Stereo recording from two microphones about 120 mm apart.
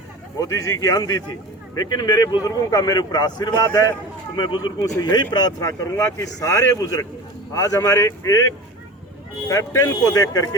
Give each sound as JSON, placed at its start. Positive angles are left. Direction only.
{"t": 0.3, "sound": "speech", "side_deg": 30}
{"t": 9.5, "sound": "speech", "side_deg": 25}